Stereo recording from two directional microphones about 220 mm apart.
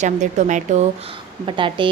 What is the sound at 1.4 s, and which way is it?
Speech, 20° right (ahead or behind).